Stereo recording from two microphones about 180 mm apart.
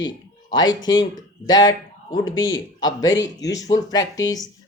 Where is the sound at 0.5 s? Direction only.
20° left (ahead or behind).